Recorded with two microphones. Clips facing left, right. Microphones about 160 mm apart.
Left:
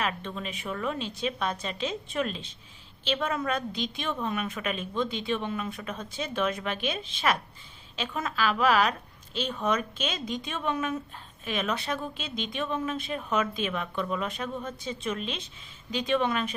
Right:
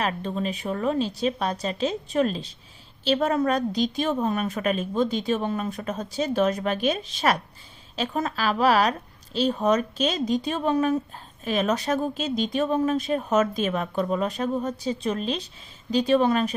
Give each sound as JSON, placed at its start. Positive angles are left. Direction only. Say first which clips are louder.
{"t": 0.0, "sound": "a woman's voice", "louder": "right 6 dB", "side_deg": -40}